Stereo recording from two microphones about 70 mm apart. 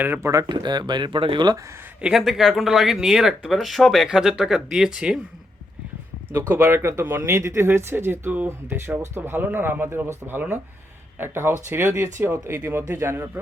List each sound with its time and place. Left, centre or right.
0.0 s speech: right
0.4 s speech: right
2.1 s speech: centre
6.6 s speech: right